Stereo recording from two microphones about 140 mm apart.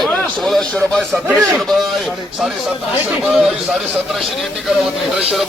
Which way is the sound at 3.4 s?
Centre (ahead or behind).